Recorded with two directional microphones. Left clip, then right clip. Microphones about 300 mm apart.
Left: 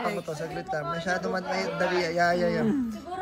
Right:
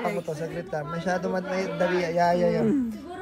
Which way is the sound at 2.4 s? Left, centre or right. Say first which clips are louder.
Right 3 dB; left.